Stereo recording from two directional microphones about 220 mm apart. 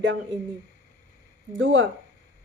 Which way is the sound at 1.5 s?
60° right (ahead or behind).